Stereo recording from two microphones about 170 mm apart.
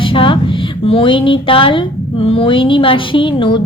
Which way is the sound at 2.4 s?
30° left (ahead or behind).